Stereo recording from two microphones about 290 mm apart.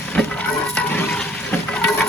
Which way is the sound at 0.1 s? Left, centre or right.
Centre.